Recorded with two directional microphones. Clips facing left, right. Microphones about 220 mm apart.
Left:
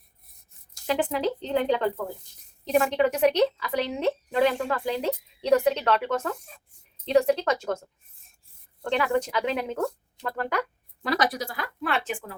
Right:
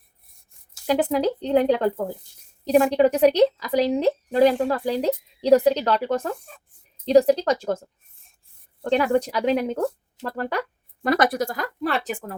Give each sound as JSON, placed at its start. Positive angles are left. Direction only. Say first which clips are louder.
{"t": 0.9, "sound": "speech", "louder": "right 5 dB", "side_deg": -40}
{"t": 11.0, "sound": "speech", "louder": "right 6 dB", "side_deg": -50}